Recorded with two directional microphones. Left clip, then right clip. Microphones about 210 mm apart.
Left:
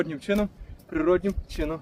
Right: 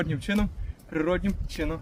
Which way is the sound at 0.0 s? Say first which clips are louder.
Left 3 dB; 5° right (ahead or behind).